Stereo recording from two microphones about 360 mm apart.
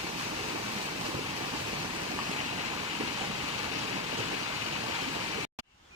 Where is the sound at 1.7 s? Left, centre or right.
Centre.